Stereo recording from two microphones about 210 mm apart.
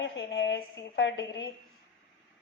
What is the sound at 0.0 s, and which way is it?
A woman's voice, 60° left (ahead or behind).